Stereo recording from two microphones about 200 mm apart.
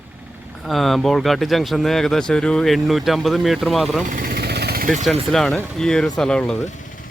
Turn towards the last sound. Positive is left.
turn(degrees=5)  # may be behind; listen again after turning